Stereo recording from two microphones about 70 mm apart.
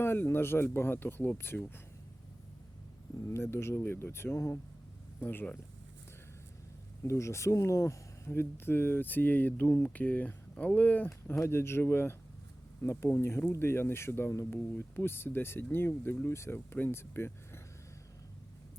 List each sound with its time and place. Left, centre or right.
0.0 s speech: left
3.2 s speech: left
5.2 s speech: left
7.0 s speech: left